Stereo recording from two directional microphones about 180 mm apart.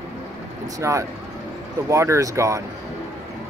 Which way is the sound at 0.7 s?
15° right (ahead or behind).